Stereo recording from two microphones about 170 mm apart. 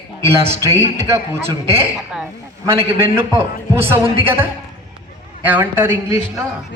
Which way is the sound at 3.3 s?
15° right (ahead or behind).